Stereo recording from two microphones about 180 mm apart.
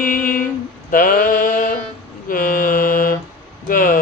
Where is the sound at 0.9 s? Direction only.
50° left (ahead or behind).